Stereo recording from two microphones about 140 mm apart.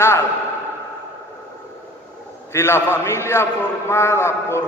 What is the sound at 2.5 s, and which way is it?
A man's voice, 20° left (ahead or behind).